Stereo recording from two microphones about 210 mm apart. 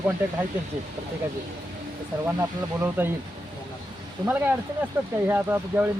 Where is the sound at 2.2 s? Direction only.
10° right (ahead or behind).